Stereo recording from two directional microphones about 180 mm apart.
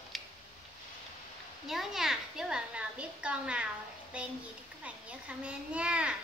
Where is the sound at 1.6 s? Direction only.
Centre (ahead or behind).